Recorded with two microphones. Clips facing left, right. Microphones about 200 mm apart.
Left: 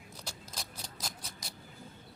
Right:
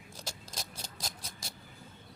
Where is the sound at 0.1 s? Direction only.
30° right (ahead or behind).